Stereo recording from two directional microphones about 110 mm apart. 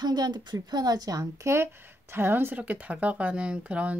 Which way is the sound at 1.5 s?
20° right (ahead or behind).